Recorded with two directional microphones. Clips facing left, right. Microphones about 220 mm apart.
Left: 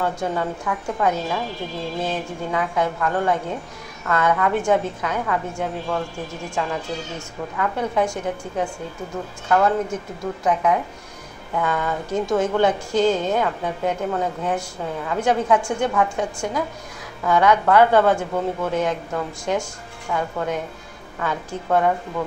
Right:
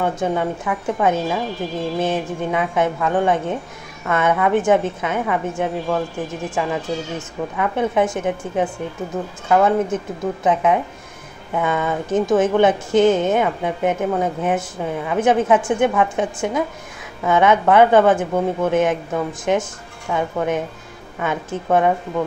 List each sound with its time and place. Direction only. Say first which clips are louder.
0.0 s a woman's voice: right 3 dB; 20° right (ahead or behind)